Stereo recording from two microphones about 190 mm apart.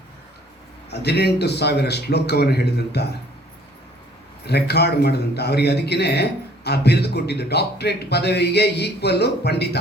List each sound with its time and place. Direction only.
0.9 s a man's voice: 60° left (ahead or behind)
4.4 s a man's voice: 60° left (ahead or behind)